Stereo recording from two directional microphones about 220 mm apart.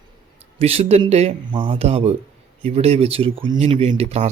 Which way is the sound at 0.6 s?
30° right (ahead or behind).